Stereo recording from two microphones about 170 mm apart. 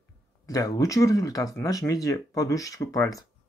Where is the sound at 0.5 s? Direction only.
20° left (ahead or behind).